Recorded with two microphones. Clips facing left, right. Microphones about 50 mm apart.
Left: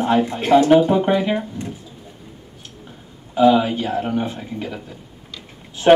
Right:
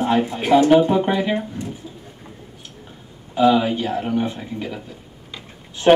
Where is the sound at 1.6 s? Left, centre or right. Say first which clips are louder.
Even; left.